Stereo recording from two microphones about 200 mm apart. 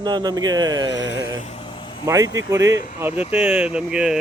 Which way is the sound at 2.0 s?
15° right (ahead or behind).